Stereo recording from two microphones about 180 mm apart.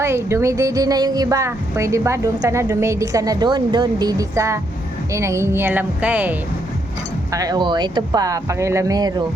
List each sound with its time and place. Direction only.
0.0 s speech: 15° right (ahead or behind)
7.3 s speech: 20° right (ahead or behind)